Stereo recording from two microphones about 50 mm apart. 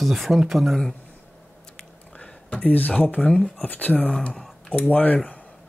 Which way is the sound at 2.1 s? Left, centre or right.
Left.